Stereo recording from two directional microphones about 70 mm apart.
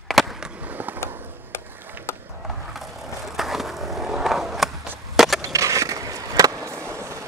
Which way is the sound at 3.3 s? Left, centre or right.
Centre.